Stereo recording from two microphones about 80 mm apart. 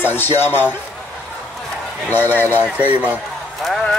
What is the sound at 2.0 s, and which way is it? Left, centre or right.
Speech, left.